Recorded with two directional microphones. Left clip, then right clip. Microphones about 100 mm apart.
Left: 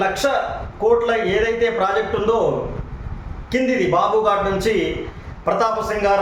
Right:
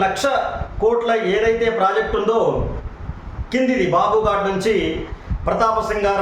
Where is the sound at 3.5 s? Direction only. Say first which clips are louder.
Even; 15° left (ahead or behind).